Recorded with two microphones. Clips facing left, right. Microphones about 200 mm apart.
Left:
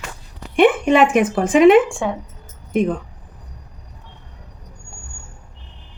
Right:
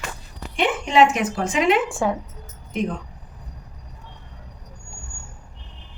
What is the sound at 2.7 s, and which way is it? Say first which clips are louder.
Speech: left 7 dB; 50° left (ahead or behind).